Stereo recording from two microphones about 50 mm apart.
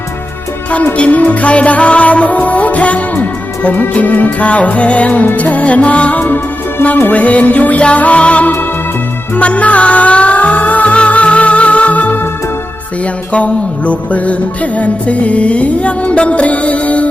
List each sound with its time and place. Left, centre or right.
0.9 s music: left
13.3 s music: left